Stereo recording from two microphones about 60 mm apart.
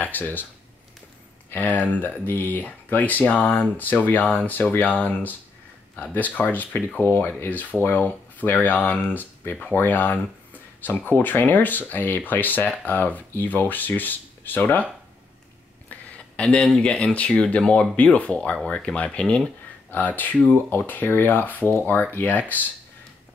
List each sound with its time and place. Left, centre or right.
0.0 s speech: left
1.5 s speech: left
6.1 s speech: left
15.9 s a sound: left
16.7 s speech: centre
19.9 s speech: left